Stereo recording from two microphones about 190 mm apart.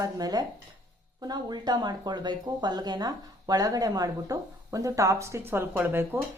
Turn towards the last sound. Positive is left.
turn(degrees=-10)  # may be behind; listen again after turning